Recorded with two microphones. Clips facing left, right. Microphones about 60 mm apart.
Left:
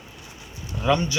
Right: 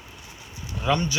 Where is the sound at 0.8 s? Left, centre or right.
Centre.